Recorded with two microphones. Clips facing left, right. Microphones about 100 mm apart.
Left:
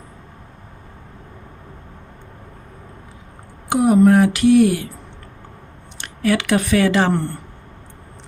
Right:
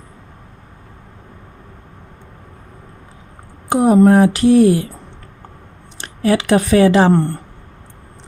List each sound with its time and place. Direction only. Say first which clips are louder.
3.7 s speech: right 2 dB; 40° right (ahead or behind)
6.0 s speech: right 3 dB; 30° right (ahead or behind)